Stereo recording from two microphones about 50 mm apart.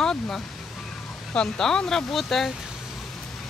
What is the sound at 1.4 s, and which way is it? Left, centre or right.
Speech, centre.